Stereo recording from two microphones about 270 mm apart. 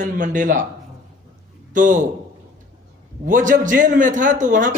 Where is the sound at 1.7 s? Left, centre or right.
Right.